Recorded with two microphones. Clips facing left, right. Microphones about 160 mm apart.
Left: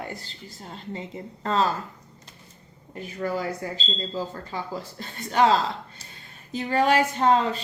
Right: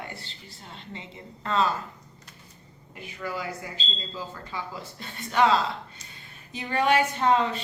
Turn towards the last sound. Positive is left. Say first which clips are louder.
# left 2 dB
turn(degrees=35)  # may be behind; listen again after turning